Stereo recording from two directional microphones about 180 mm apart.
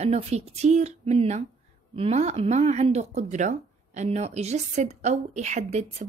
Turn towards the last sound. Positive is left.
turn(degrees=-40)  # may be behind; listen again after turning